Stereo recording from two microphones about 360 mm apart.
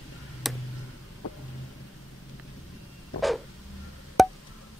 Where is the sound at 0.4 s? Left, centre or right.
Centre.